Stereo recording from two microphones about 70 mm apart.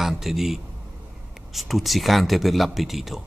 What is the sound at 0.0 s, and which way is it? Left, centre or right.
A man's voice, centre.